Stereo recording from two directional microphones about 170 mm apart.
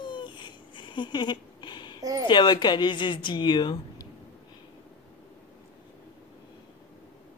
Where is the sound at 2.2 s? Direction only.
25° left (ahead or behind).